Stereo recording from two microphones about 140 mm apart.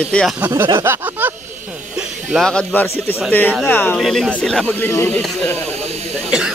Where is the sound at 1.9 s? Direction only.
5° right (ahead or behind).